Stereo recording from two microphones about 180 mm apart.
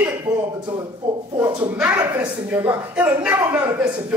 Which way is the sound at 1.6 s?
10° right (ahead or behind).